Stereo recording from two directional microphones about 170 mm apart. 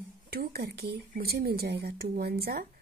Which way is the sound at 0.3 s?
65° right (ahead or behind).